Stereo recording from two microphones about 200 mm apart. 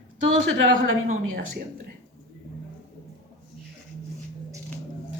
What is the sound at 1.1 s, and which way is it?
Speech, 45° right (ahead or behind).